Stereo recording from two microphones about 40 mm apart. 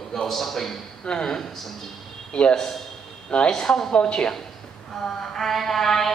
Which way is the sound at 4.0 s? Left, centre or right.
Left.